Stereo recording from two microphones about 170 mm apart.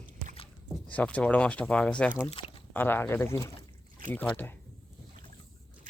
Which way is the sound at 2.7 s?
10° left (ahead or behind).